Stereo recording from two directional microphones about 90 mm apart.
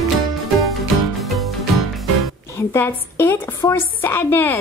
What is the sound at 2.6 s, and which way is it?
A woman's voice, 30° left (ahead or behind).